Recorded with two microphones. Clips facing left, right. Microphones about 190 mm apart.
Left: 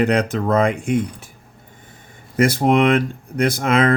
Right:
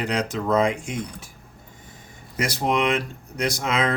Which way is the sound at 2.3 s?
55° left (ahead or behind).